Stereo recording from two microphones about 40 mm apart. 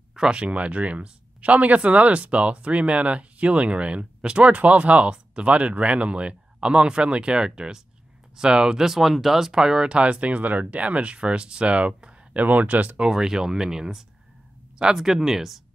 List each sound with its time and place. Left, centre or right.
0.1 s speech: right
8.7 s speech: centre; by 12.4 s right
12.4 s speech: right
13.0 s speech: centre